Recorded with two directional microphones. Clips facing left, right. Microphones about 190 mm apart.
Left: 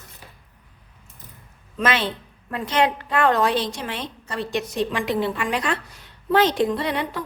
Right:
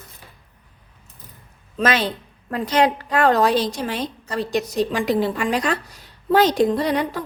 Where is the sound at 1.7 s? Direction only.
40° right (ahead or behind).